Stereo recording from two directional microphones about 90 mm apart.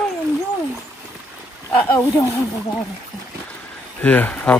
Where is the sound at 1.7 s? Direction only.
25° left (ahead or behind).